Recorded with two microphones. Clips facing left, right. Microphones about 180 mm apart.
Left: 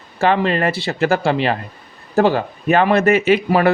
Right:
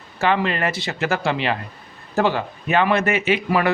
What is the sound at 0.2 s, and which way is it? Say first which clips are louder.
Speech: left 4 dB; 35° left (ahead or behind).